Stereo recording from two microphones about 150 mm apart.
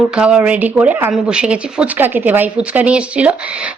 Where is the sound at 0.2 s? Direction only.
5° right (ahead or behind).